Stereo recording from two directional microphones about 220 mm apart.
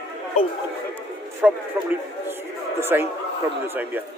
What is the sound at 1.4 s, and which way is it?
Speech, 5° right (ahead or behind).